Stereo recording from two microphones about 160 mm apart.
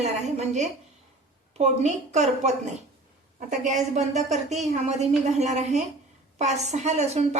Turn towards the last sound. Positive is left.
turn(degrees=-45)  # may be behind; listen again after turning